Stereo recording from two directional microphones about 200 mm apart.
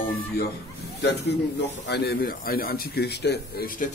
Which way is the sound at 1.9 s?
45° left (ahead or behind).